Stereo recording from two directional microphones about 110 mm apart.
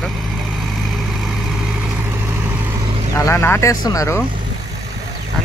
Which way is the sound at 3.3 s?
20° left (ahead or behind).